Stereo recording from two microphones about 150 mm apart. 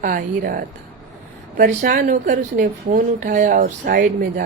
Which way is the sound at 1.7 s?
60° right (ahead or behind).